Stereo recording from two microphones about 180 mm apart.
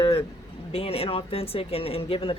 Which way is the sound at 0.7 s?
35° left (ahead or behind).